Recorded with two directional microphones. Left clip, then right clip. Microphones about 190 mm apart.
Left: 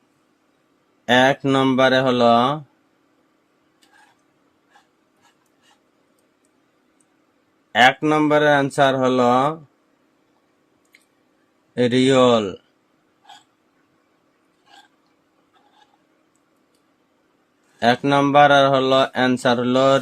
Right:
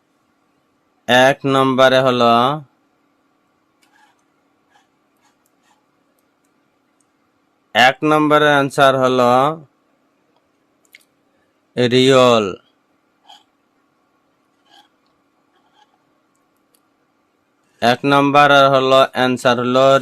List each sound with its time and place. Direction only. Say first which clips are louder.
1.0 s speech: right 4 dB; 20° right (ahead or behind)
7.7 s speech: right 3 dB; 25° right (ahead or behind)
11.7 s a man's voice: right 4 dB; 35° right (ahead or behind)
17.7 s speech: right 3 dB; 25° right (ahead or behind)